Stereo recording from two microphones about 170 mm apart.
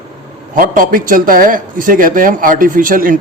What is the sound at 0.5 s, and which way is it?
Speech, 55° right (ahead or behind).